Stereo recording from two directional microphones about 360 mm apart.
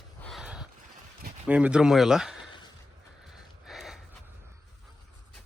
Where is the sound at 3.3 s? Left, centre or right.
Centre.